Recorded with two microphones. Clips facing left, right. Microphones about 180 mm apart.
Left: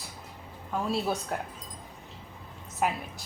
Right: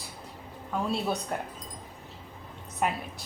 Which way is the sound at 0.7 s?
Centre (ahead or behind).